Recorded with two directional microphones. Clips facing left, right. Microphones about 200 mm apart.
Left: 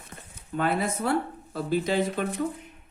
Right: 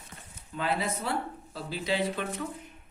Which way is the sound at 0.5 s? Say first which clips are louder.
Left 4 dB; 50° left (ahead or behind).